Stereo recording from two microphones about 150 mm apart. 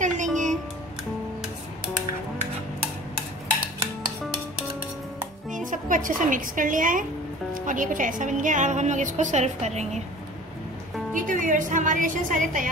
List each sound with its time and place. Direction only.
0.0 s music: 55° right (ahead or behind)
5.5 s a woman's voice: 60° right (ahead or behind)
11.1 s a woman's voice: 60° right (ahead or behind)